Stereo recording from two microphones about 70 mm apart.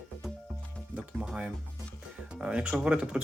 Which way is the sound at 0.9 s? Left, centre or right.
Centre.